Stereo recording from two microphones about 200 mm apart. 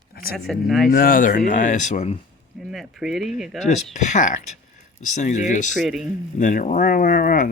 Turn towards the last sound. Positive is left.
turn(degrees=40)  # may be behind; listen again after turning